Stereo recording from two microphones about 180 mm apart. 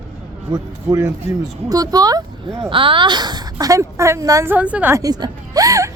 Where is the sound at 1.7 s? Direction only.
20° right (ahead or behind).